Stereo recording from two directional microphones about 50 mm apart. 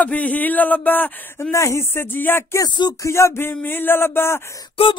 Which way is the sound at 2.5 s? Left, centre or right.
Left.